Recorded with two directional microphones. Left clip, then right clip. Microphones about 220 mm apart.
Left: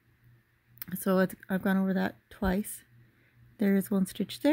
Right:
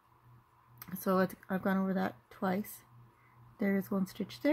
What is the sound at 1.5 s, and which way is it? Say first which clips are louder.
Speech: left 3 dB; 40° left (ahead or behind).